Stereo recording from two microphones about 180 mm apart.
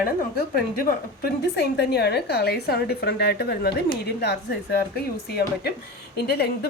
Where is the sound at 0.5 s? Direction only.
55° left (ahead or behind).